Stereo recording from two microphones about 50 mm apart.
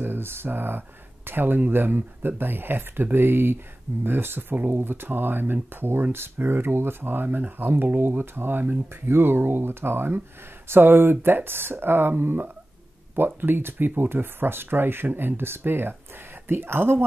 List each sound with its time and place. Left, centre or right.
0.0 s speech: right